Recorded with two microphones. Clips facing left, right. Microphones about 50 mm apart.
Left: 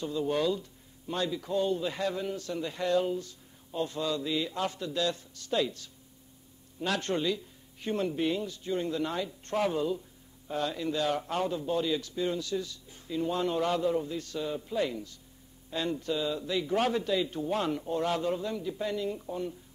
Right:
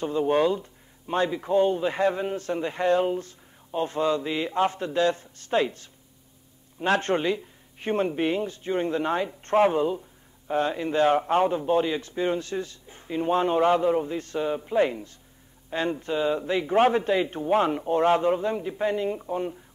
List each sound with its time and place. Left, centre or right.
0.0 s speech: right